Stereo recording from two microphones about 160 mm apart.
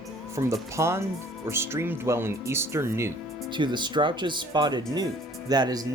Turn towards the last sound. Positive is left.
turn(degrees=-25)  # may be behind; listen again after turning